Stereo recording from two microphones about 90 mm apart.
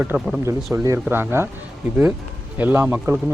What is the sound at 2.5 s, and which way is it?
Speech, 20° right (ahead or behind).